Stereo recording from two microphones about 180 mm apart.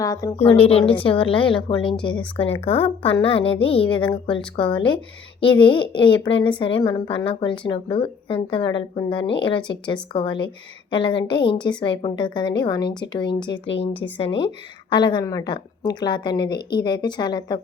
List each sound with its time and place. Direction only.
0.0 s a woman's voice: 20° left (ahead or behind)
0.3 s a woman's voice: 35° left (ahead or behind)
13.5 s speech: 80° left
14.0 s a woman's voice: 30° left (ahead or behind)